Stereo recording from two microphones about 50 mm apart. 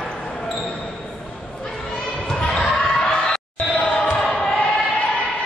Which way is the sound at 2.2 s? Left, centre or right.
Centre.